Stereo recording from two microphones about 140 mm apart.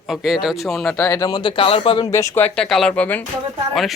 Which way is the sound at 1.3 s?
35° left (ahead or behind).